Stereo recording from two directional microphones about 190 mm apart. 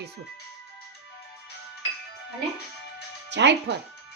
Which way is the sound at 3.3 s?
65° right (ahead or behind).